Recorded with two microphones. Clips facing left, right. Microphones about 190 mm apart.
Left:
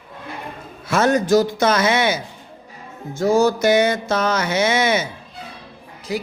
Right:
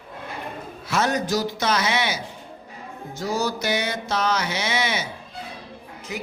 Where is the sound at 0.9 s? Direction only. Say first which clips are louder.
Left 7 dB; 50° left (ahead or behind).